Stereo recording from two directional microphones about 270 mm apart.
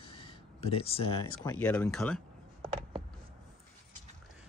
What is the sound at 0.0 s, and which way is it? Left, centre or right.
Speech, centre.